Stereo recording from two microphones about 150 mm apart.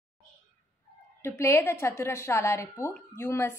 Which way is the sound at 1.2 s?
20° left (ahead or behind).